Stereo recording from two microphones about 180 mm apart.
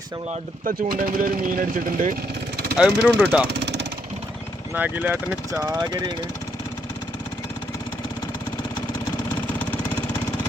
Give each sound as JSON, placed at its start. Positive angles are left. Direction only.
{"t": 0.6, "sound": "speech", "side_deg": -50}
{"t": 2.7, "sound": "speech", "side_deg": -5}
{"t": 3.5, "sound": "vehicle", "side_deg": -70}
{"t": 4.7, "sound": "speech", "side_deg": -10}